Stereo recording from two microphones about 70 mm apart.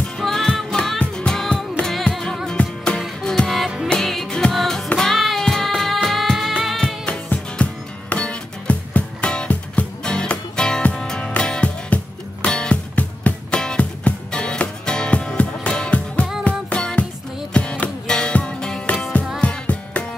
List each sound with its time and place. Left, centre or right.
0.2 s music: centre
7.1 s music: centre